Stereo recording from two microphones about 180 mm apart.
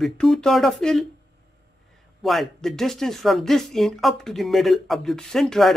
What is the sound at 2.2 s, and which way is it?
Speech, centre (ahead or behind).